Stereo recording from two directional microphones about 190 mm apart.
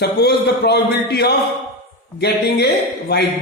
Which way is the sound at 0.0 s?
60° left (ahead or behind).